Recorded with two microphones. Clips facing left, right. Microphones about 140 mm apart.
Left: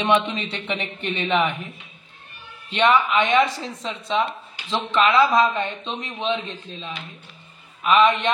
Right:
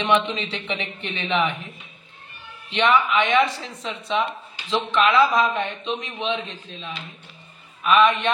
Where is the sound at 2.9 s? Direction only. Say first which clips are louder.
Even; 35° left (ahead or behind).